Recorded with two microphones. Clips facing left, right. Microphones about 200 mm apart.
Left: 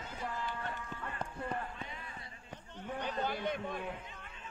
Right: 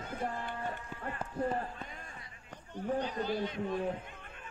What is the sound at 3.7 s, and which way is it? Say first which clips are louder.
Speech: right 7 dB; 30° right (ahead or behind).